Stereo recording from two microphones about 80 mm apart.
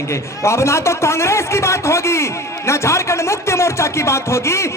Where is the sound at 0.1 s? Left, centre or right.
Left.